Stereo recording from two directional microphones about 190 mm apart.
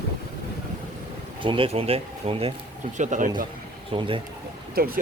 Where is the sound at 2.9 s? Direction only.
40° right (ahead or behind).